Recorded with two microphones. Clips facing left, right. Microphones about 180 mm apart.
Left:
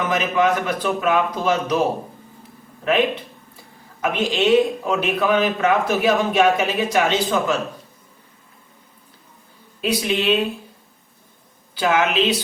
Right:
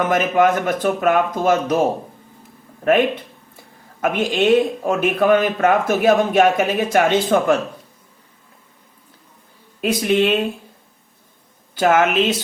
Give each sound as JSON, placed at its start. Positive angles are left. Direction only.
{"t": 0.1, "sound": "speech", "side_deg": -50}
{"t": 4.0, "sound": "speech", "side_deg": -50}
{"t": 9.8, "sound": "speech", "side_deg": -50}
{"t": 11.7, "sound": "speech", "side_deg": -45}